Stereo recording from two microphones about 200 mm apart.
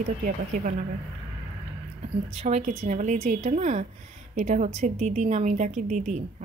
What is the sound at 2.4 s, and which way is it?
A woman's voice, 35° right (ahead or behind).